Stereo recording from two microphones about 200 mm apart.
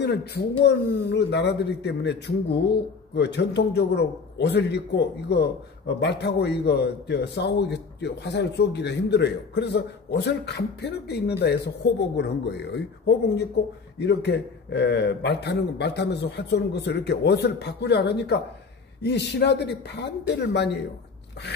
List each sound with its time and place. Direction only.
0.0 s speech: 55° left (ahead or behind)